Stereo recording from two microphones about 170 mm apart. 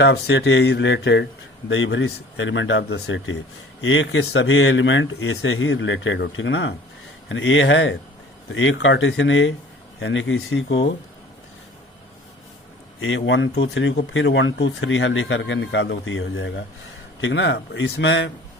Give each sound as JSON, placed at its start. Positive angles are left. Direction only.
{"t": 0.0, "sound": "a man's voice", "side_deg": 90}
{"t": 13.1, "sound": "a man's voice", "side_deg": 90}